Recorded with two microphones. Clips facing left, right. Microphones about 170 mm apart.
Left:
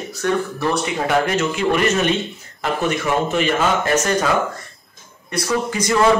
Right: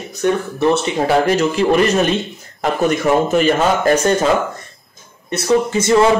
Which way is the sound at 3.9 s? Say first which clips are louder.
Right 3 dB; 25° right (ahead or behind).